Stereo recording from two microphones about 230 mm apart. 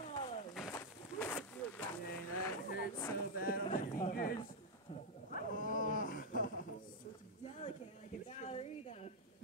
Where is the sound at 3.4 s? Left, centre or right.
Left.